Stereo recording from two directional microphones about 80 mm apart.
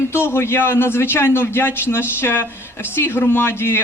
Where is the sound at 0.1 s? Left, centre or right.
Left.